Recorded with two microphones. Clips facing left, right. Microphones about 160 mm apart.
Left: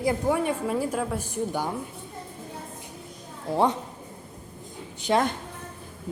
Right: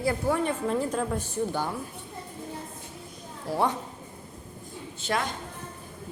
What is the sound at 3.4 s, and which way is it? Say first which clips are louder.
Speech: left 3 dB; 20° left (ahead or behind).